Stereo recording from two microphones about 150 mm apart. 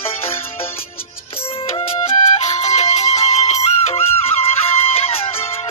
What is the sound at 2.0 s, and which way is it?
Music, 50° left (ahead or behind).